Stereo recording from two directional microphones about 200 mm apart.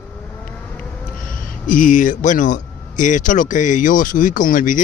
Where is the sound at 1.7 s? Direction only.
40° left (ahead or behind).